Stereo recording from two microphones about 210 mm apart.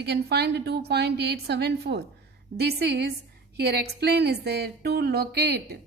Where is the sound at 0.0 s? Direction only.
50° right (ahead or behind).